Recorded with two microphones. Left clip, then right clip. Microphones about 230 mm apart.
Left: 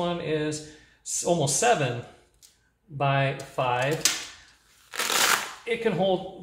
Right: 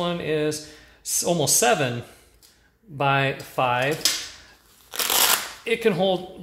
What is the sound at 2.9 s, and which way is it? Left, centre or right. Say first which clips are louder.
Speech: right 4 dB; right.